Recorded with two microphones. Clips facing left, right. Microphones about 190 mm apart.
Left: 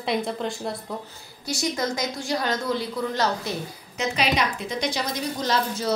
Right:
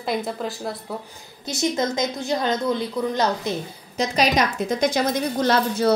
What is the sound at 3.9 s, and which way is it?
A woman's voice, 40° right (ahead or behind).